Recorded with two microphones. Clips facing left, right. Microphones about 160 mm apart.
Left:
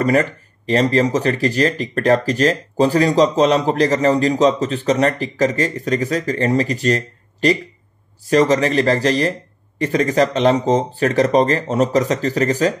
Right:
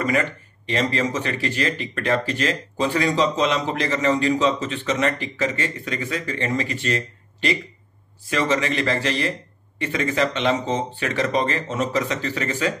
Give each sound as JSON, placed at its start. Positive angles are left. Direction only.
{"t": 0.0, "sound": "speech", "side_deg": 40}